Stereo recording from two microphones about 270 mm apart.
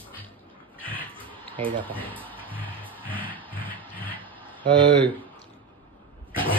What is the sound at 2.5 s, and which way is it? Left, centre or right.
Music, centre.